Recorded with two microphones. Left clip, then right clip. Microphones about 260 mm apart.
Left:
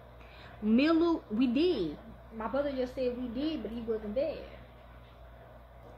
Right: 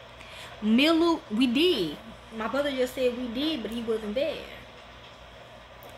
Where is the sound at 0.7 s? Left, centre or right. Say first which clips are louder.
Right 5 dB; right.